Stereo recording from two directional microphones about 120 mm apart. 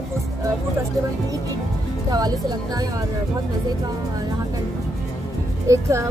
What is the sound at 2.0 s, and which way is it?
Speech, 35° right (ahead or behind).